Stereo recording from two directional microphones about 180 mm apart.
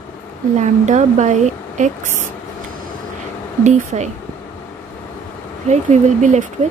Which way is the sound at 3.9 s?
40° right (ahead or behind).